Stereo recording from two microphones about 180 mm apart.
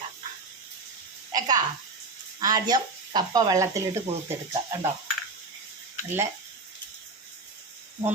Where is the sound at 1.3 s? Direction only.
20° right (ahead or behind).